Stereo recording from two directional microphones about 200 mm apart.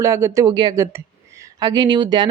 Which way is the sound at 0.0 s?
15° right (ahead or behind).